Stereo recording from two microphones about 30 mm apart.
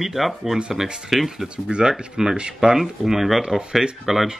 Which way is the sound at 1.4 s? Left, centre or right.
Right.